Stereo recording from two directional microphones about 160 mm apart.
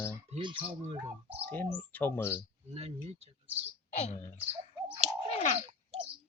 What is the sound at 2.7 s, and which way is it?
Speech, 40° right (ahead or behind).